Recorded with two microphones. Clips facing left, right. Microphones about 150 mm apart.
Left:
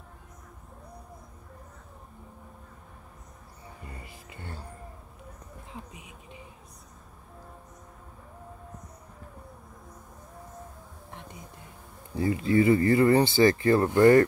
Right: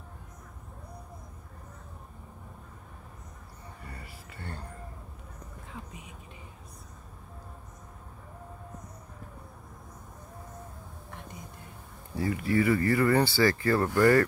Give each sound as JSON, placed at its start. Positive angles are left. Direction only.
{"t": 3.8, "sound": "music", "side_deg": 20}
{"t": 12.2, "sound": "speech", "side_deg": 25}